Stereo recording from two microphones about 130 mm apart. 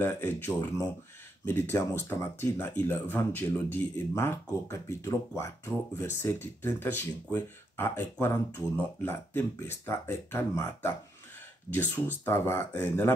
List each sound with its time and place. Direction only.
0.0 s speech: 15° left (ahead or behind)